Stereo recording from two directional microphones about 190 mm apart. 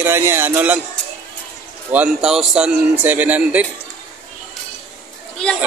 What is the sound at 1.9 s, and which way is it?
Speech, 5° right (ahead or behind).